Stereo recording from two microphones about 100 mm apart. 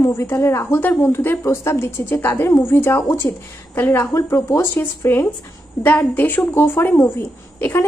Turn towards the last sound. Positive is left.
turn(degrees=25)  # may be behind; listen again after turning